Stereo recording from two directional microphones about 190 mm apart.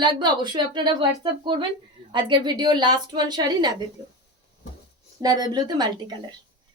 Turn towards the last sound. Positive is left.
turn(degrees=-20)  # may be behind; listen again after turning